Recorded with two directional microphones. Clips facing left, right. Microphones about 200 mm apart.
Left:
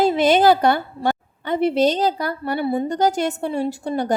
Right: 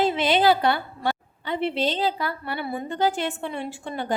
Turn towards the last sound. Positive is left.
turn(degrees=40)  # may be behind; listen again after turning